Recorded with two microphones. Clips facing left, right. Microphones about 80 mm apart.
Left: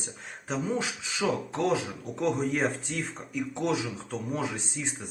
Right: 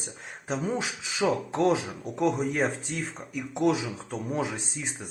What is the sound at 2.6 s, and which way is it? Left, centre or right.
Speech, centre.